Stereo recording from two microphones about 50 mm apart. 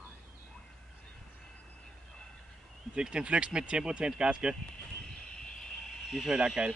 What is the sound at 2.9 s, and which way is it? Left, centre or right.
Speech, centre.